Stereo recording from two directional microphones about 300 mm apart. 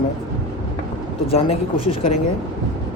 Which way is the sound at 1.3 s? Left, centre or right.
Centre.